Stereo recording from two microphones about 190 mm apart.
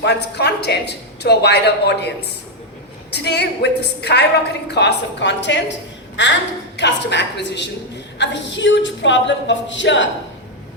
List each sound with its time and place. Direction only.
0.0 s a woman's voice: 60° left (ahead or behind)
3.1 s a woman's voice: 60° left (ahead or behind)
6.7 s a woman's voice: 65° left (ahead or behind)